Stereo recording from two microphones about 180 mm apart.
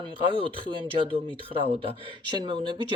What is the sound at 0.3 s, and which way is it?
Speech, 30° right (ahead or behind).